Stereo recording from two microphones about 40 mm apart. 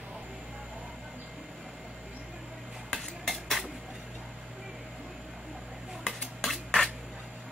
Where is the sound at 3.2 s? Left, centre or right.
Centre.